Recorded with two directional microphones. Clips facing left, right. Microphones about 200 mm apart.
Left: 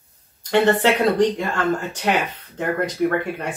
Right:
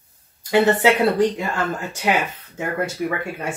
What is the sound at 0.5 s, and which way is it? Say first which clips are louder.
Speech: right 1 dB; 10° right (ahead or behind).